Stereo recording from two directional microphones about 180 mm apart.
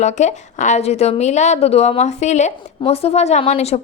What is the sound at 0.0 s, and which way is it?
A woman's voice, 40° left (ahead or behind).